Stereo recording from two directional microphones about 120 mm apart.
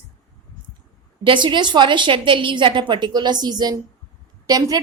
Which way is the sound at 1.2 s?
40° right (ahead or behind).